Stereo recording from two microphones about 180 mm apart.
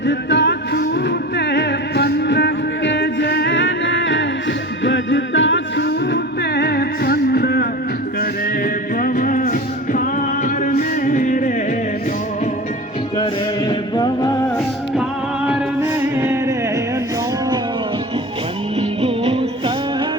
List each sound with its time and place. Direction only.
0.0 s music: 80° left; by 7.7 s 60° left (ahead or behind)
9.0 s music: 50° left (ahead or behind)
13.7 s music: 25° left (ahead or behind)
15.4 s music: 10° right (ahead or behind)
18.8 s music: 35° right (ahead or behind)